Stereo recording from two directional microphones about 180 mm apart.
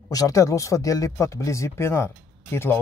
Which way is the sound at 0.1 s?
20° left (ahead or behind).